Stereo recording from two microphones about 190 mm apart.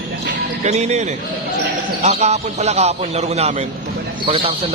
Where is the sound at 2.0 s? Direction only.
35° right (ahead or behind).